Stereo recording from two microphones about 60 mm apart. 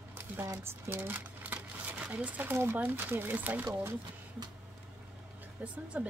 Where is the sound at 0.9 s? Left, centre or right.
Right.